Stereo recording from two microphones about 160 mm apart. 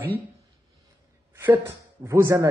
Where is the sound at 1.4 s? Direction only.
15° right (ahead or behind).